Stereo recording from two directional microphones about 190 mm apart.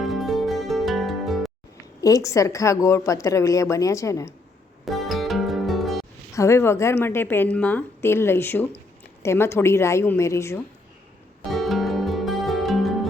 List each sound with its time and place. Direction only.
0.0 s music: centre (ahead or behind)
2.0 s a woman's voice: 15° left (ahead or behind)
4.9 s music: centre (ahead or behind)
6.3 s a woman's voice: 15° left (ahead or behind)
11.4 s music: centre (ahead or behind)